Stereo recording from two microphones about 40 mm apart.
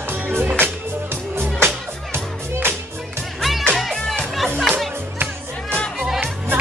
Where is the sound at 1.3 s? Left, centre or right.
Right.